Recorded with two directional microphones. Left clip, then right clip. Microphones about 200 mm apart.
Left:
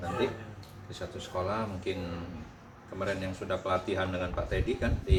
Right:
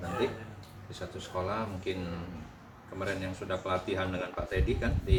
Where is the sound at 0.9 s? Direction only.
15° left (ahead or behind).